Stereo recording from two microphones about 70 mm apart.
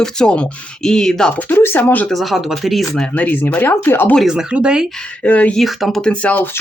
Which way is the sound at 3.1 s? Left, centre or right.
Left.